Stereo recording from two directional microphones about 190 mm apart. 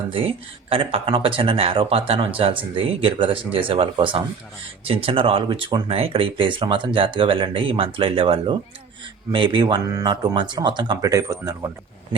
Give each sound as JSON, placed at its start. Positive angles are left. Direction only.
{"t": 0.1, "sound": "speech", "side_deg": -30}